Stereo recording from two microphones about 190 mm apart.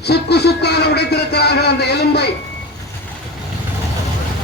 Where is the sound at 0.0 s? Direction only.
60° left (ahead or behind).